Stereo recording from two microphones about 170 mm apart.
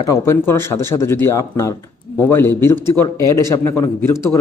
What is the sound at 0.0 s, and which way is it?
A man's voice, 15° left (ahead or behind).